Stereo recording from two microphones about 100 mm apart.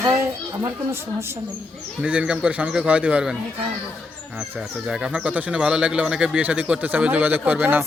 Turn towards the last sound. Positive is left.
turn(degrees=-20)  # may be behind; listen again after turning